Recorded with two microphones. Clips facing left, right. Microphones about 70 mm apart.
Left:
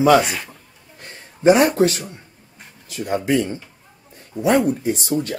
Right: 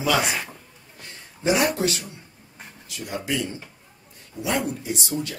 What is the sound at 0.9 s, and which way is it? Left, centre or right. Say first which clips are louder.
A man's voice: left 4 dB; left.